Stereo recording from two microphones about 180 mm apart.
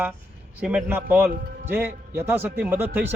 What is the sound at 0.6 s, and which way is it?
Speech, 5° right (ahead or behind).